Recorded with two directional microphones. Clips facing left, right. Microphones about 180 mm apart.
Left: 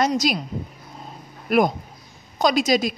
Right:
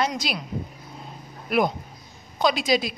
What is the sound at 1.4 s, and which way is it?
Speech, 45° left (ahead or behind).